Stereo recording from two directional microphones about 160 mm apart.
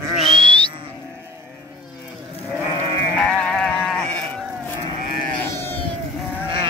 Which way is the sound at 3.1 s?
5° left (ahead or behind).